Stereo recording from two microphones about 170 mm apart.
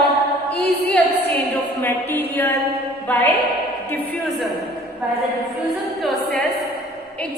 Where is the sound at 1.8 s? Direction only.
10° left (ahead or behind).